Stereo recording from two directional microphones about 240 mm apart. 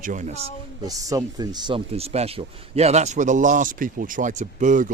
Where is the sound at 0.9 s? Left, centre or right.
Centre.